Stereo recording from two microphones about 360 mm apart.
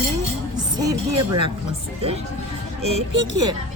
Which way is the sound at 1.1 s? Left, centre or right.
Right.